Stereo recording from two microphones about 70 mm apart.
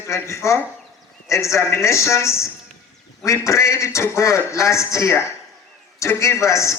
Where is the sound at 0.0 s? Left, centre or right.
Left.